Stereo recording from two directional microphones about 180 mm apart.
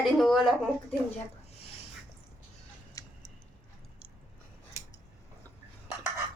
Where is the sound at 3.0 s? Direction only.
20° left (ahead or behind).